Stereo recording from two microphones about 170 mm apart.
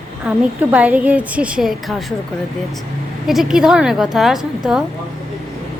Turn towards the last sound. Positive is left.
turn(degrees=0)  # may be behind; listen again after turning